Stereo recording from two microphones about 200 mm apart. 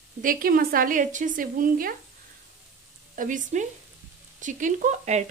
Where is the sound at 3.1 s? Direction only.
40° right (ahead or behind).